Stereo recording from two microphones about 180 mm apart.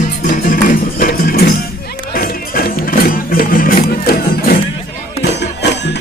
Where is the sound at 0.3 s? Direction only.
50° left (ahead or behind).